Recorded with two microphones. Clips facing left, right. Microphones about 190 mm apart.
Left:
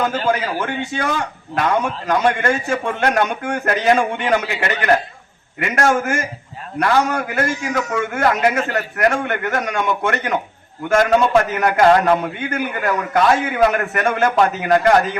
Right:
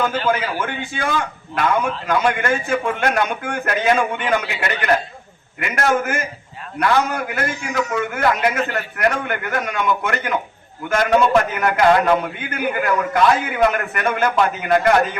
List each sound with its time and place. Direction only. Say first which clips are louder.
0.0 s a man's voice: left 1 dB; 40° left (ahead or behind)
11.5 s a man's voice: left 2 dB; 40° left (ahead or behind)